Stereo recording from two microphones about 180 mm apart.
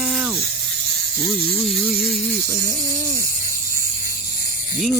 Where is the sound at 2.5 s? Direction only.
15° left (ahead or behind).